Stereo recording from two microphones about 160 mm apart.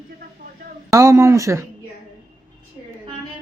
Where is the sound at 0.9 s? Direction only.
20° right (ahead or behind).